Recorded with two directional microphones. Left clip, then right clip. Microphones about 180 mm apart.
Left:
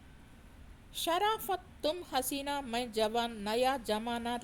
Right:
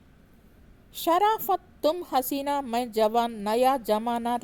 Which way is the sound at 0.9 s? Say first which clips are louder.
Right 9 dB; 40° right (ahead or behind).